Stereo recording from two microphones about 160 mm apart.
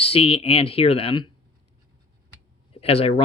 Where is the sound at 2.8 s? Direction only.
35° left (ahead or behind).